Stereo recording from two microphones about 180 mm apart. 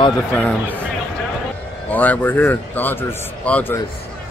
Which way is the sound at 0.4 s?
5° left (ahead or behind).